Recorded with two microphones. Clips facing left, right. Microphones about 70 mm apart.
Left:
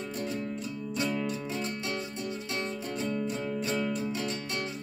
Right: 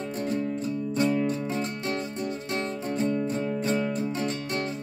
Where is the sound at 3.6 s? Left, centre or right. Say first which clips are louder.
Right 3 dB; right.